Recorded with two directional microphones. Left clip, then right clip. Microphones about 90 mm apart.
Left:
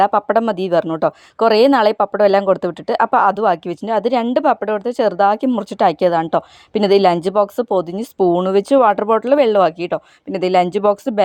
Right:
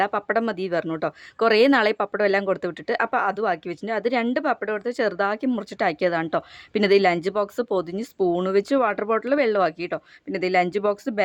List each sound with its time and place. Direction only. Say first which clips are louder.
0.0 s speech: left 9 dB; 30° left (ahead or behind)
1.4 s speech: left 6 dB; 25° left (ahead or behind)
2.2 s speech: left 8 dB; 35° left (ahead or behind)
7.0 s speech: left 7 dB; 35° left (ahead or behind); by 7.9 s 20° left (ahead or behind)
7.9 s speech: left 7 dB; 35° left (ahead or behind)